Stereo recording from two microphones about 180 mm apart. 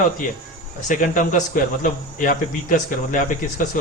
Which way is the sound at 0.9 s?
45° left (ahead or behind).